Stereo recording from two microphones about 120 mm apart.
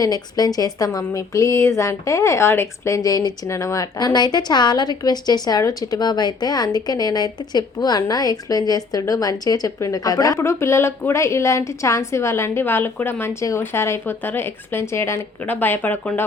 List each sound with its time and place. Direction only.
0.0 s a woman's voice: 35° left (ahead or behind); by 16.2 s 15° left (ahead or behind)